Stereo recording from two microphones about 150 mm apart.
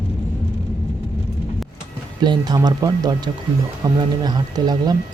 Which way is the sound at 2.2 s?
30° right (ahead or behind).